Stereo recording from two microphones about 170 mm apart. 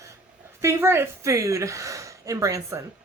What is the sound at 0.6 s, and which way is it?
A woman's voice, 15° right (ahead or behind).